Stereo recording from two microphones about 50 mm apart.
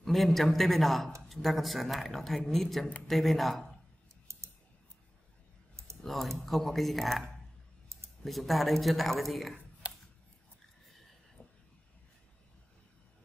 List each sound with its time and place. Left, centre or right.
0.0 s speech: centre
4.3 s clicking: right
6.0 s speech: centre